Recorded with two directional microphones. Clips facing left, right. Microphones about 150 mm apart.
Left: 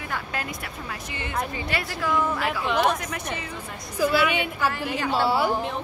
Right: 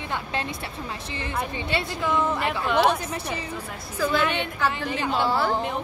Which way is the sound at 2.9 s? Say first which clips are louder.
Right 1 dB; 30° right (ahead or behind).